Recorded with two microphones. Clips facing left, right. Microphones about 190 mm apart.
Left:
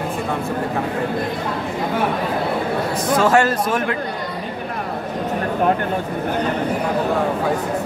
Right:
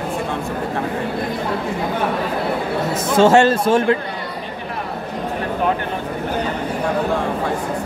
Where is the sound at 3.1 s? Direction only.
25° right (ahead or behind).